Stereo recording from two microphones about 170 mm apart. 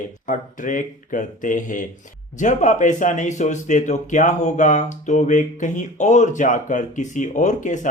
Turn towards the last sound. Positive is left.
turn(degrees=45)  # may be behind; listen again after turning